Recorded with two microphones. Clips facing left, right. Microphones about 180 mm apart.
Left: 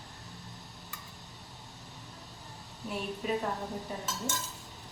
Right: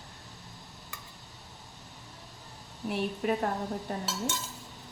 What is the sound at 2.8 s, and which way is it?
A woman's voice, 65° right (ahead or behind).